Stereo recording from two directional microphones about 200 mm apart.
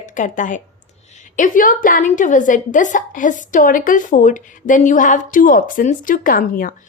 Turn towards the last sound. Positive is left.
turn(degrees=45)  # may be behind; listen again after turning